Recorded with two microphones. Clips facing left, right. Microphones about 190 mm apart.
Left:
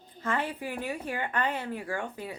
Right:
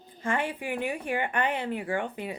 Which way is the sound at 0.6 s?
15° right (ahead or behind).